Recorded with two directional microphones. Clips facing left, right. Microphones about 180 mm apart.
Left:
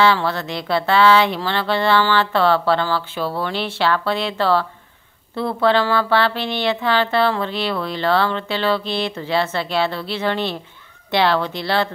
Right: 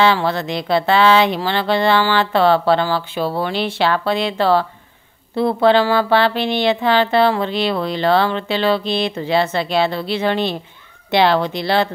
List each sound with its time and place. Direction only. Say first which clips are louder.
0.0 s speech: right 2 dB; 15° right (ahead or behind)